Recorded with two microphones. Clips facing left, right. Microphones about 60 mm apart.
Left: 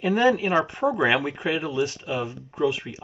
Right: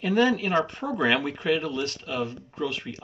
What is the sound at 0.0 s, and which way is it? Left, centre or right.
Speech, centre.